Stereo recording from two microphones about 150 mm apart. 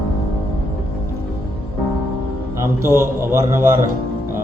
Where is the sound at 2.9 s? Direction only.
15° right (ahead or behind).